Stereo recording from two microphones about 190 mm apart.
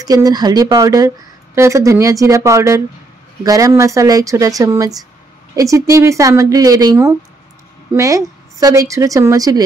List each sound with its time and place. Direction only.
0.0 s speech: 20° right (ahead or behind)